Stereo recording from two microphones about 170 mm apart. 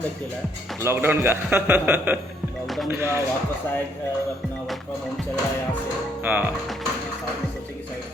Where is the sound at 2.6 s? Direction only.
Centre (ahead or behind).